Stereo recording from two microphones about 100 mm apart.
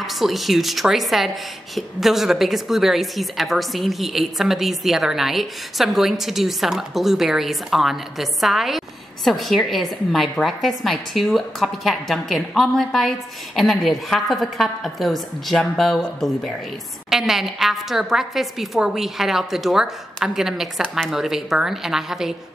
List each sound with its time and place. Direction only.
0.0 s a woman's voice: centre (ahead or behind)